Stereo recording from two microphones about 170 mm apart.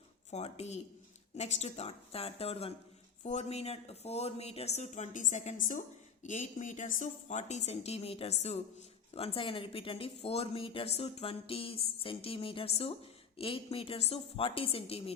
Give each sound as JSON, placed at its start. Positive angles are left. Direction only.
{"t": 0.3, "sound": "a woman's voice", "side_deg": 40}